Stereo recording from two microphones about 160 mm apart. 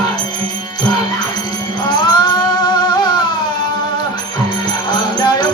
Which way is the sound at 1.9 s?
25° left (ahead or behind).